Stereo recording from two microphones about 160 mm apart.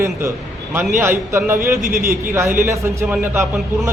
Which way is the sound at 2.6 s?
15° right (ahead or behind).